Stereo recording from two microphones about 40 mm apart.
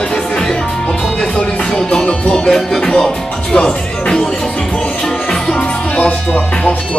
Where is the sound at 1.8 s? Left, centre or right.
Centre.